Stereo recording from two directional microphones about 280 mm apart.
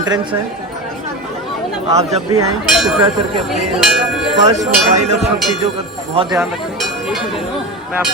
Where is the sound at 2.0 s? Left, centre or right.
Right.